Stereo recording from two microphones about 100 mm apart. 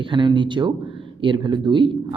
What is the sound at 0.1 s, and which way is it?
A man's voice, 50° right (ahead or behind).